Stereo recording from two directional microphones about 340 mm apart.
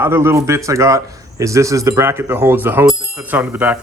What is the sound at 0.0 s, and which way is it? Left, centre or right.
A man's voice, centre.